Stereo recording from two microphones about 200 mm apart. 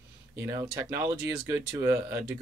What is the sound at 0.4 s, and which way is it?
Speech, 15° right (ahead or behind).